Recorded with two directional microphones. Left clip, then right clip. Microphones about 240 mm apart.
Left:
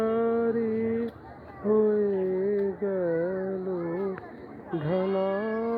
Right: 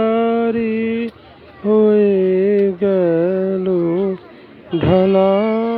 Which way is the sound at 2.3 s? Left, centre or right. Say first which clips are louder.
Right 12 dB; right.